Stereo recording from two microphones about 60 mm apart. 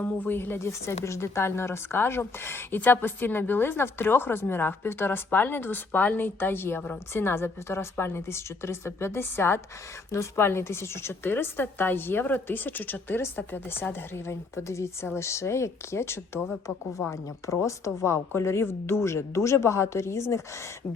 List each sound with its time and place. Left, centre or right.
0.0 s speech: left
0.7 s a woman's voice: left
17.1 s a woman's voice: left